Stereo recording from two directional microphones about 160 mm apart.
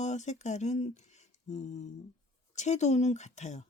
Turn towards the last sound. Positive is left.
turn(degrees=45)  # may be behind; listen again after turning